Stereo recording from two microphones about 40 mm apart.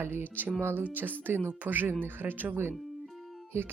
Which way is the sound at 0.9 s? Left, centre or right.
Right.